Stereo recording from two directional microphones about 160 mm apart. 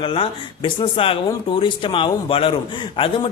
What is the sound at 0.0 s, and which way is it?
A man's voice, 30° left (ahead or behind).